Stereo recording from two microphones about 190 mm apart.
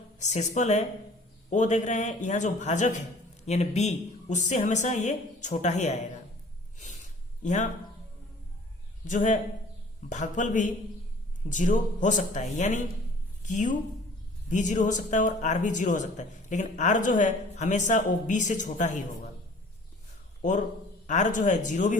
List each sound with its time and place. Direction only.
0.2 s a man's voice: 40° left (ahead or behind)
6.7 s a sound: 40° left (ahead or behind)
7.4 s a man's voice: 40° left (ahead or behind)
9.0 s a man's voice: 40° left (ahead or behind)
20.4 s a man's voice: 40° left (ahead or behind)